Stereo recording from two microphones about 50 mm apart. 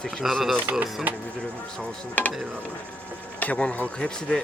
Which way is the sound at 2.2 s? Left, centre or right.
Left.